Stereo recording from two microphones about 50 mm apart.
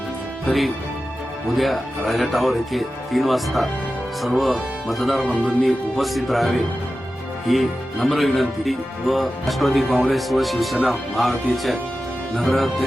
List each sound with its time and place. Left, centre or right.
0.4 s speech: centre
5.2 s speech: left
5.6 s speech: centre